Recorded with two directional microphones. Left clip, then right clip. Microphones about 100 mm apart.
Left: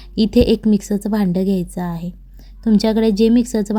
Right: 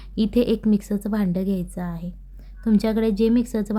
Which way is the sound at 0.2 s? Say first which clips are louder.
Left 6 dB; 30° left (ahead or behind).